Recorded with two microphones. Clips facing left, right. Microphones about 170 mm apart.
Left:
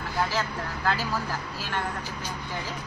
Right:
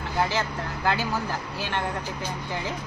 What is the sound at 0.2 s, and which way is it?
A woman's voice, 20° right (ahead or behind).